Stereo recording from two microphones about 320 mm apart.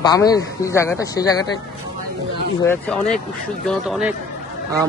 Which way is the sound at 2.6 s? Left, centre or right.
Centre.